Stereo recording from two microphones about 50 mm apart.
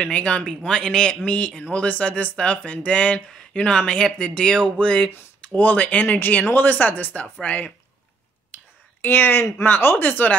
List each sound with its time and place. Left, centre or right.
0.0 s speech: left
5.4 s speech: left
8.5 s whispering: left
9.0 s speech: left